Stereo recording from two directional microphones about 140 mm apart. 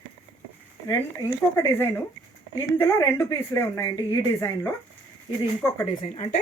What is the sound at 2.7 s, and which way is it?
Speech, 20° left (ahead or behind).